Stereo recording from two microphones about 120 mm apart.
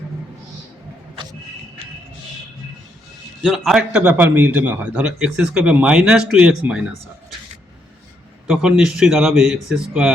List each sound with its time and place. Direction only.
1.1 s vehicle: 35° right (ahead or behind)
3.4 s a man's voice: centre (ahead or behind)
8.4 s speech: 5° right (ahead or behind)